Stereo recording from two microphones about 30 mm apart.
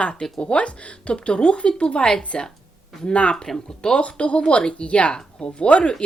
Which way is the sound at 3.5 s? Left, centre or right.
Left.